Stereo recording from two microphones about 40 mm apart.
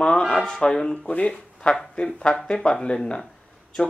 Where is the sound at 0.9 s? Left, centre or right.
Left.